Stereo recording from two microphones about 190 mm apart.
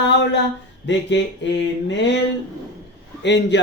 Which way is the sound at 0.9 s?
70° left (ahead or behind).